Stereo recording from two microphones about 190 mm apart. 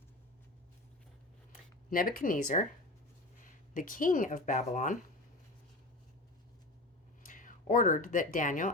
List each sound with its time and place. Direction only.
1.9 s speech: 50° left (ahead or behind)
3.8 s speech: 45° left (ahead or behind)
7.3 s speech: 45° left (ahead or behind)